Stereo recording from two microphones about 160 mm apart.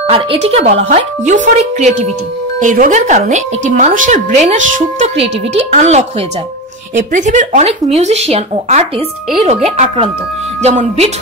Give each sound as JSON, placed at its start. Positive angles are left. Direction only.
{"t": 0.1, "sound": "speech", "side_deg": -35}
{"t": 5.1, "sound": "a woman's voice", "side_deg": -40}